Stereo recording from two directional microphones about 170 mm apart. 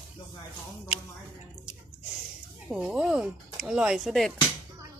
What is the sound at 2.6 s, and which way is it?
Speech, 5° right (ahead or behind).